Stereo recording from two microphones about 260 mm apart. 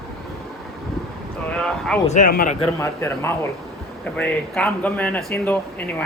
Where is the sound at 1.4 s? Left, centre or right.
Centre.